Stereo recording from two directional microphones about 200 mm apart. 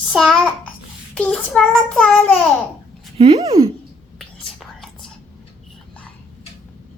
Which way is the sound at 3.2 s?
30° right (ahead or behind).